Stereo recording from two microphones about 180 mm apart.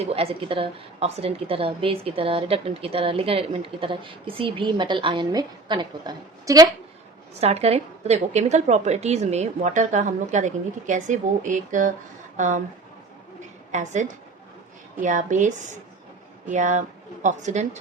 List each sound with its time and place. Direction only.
0.0 s a woman's voice: 35° right (ahead or behind)
7.4 s a woman's voice: 35° right (ahead or behind)
13.7 s a woman's voice: 40° right (ahead or behind)